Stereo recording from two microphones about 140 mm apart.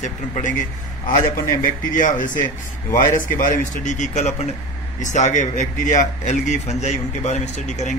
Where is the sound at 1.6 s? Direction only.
65° left (ahead or behind).